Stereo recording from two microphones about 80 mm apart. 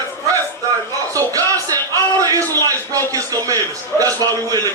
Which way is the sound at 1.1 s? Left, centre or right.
Right.